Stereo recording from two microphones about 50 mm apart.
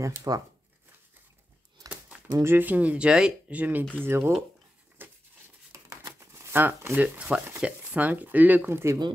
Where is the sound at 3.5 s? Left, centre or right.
Right.